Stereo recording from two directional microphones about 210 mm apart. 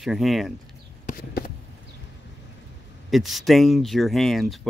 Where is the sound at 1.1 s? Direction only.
45° left (ahead or behind).